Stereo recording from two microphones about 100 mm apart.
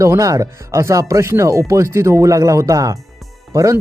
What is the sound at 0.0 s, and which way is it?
Speech, 35° right (ahead or behind).